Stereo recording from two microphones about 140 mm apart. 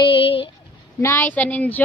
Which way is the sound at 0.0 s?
40° left (ahead or behind).